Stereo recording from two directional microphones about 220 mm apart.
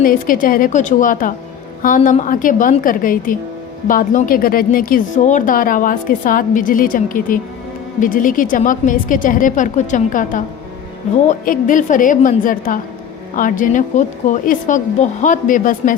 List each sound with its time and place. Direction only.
0.0 s speech: 40° left (ahead or behind)